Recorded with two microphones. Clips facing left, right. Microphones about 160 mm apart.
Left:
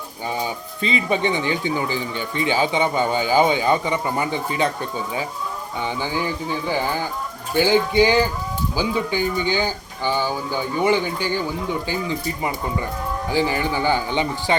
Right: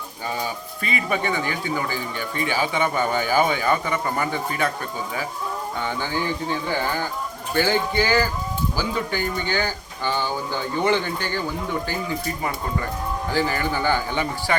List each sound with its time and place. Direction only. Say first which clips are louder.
0.3 s speech: left 4 dB; 25° left (ahead or behind)
5.8 s speech: left 3 dB; 15° left (ahead or behind)